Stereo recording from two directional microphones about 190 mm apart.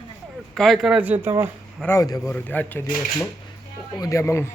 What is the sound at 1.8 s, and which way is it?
A man's voice, 15° left (ahead or behind).